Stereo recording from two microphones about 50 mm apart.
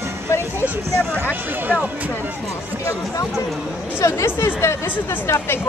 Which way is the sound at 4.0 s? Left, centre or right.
Left.